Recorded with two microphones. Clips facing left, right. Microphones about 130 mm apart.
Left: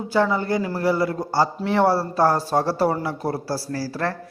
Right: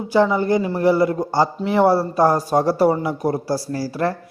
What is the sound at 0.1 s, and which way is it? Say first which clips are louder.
A man's voice: right 4 dB; 15° right (ahead or behind).